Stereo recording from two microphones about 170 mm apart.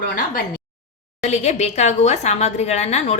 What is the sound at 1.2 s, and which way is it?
A woman's voice, 40° left (ahead or behind).